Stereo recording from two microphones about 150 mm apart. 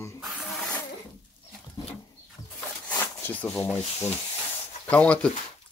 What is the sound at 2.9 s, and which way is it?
Zipper, 15° left (ahead or behind).